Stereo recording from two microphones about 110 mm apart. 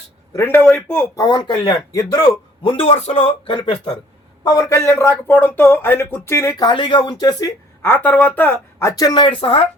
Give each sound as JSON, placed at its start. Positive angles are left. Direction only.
{"t": 0.3, "sound": "a man's voice", "side_deg": 20}
{"t": 1.1, "sound": "speech", "side_deg": 40}
{"t": 1.9, "sound": "speech", "side_deg": 30}
{"t": 2.6, "sound": "speech", "side_deg": 60}
{"t": 4.4, "sound": "speech", "side_deg": 30}
{"t": 6.7, "sound": "speech", "side_deg": 45}
{"t": 7.8, "sound": "speech", "side_deg": 20}